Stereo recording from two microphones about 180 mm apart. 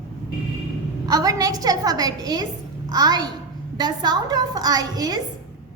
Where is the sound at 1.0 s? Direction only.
20° right (ahead or behind).